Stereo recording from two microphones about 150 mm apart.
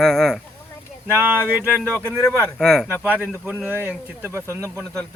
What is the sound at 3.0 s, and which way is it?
Speech, 10° right (ahead or behind).